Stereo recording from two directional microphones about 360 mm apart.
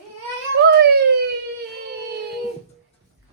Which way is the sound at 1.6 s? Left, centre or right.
Right.